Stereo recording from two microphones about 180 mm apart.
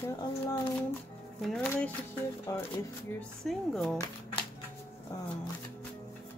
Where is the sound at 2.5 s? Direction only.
20° left (ahead or behind).